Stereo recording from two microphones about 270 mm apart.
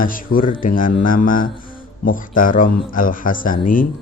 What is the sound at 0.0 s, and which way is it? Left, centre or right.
Speech, left.